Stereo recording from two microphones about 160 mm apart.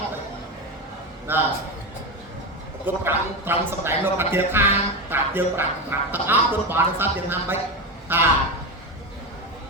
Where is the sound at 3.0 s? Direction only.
15° right (ahead or behind).